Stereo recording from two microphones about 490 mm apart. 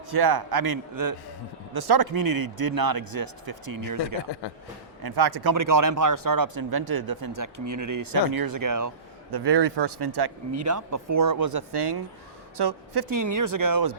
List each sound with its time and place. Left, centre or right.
0.1 s speech: right
5.0 s speech: right
9.3 s speech: right
10.5 s speech: right